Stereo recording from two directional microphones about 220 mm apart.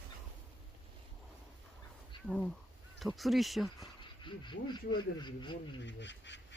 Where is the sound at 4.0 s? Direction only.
20° left (ahead or behind).